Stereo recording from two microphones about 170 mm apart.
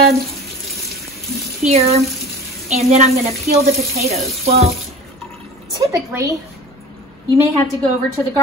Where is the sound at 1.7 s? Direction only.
35° right (ahead or behind).